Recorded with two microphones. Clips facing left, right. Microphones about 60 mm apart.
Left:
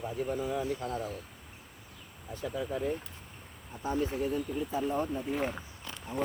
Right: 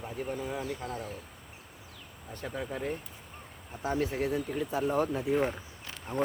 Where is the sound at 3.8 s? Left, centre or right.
Right.